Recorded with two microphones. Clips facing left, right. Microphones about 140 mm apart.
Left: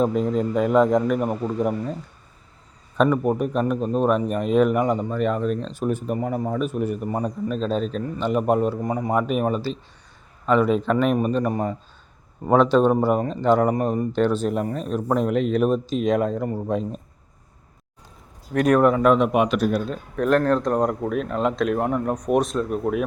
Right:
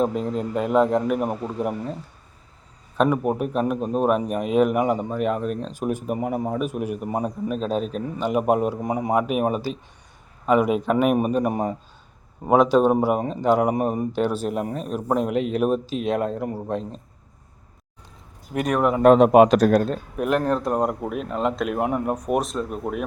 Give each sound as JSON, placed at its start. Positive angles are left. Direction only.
{"t": 0.0, "sound": "speech", "side_deg": 0}
{"t": 3.0, "sound": "a man's voice", "side_deg": -5}
{"t": 18.5, "sound": "speech", "side_deg": 0}
{"t": 18.9, "sound": "speech", "side_deg": -35}
{"t": 20.1, "sound": "speech", "side_deg": -10}